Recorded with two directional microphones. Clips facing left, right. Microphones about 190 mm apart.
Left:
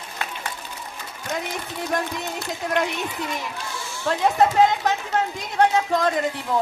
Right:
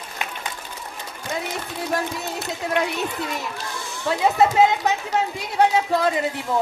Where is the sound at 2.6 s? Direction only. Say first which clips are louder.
Even; 5° right (ahead or behind).